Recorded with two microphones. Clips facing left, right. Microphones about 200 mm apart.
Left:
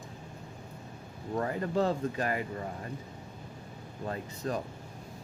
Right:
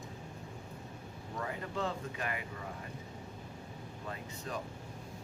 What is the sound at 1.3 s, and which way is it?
Speech, 45° left (ahead or behind).